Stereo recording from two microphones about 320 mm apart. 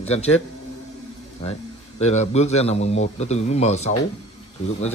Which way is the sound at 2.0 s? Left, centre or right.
Left.